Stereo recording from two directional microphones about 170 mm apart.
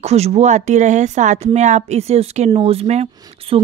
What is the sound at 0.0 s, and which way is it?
Speech, 40° right (ahead or behind).